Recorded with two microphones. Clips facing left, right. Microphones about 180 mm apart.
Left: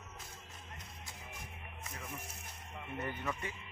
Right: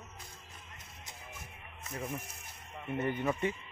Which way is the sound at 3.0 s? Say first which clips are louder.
Right 8 dB; 25° right (ahead or behind).